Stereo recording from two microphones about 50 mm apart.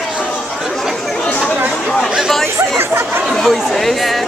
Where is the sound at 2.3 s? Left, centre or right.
Centre.